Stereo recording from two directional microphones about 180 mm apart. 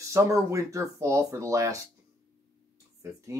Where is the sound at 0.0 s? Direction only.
15° right (ahead or behind).